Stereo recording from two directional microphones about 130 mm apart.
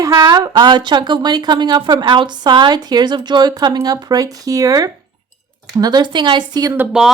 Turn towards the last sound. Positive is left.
turn(degrees=-15)  # may be behind; listen again after turning